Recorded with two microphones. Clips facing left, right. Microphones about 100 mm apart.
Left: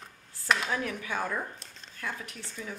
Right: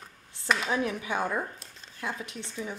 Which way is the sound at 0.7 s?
20° right (ahead or behind).